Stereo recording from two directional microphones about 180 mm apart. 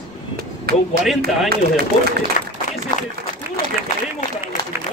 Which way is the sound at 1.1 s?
60° right (ahead or behind).